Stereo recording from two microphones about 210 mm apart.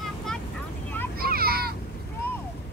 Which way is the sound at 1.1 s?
45° right (ahead or behind).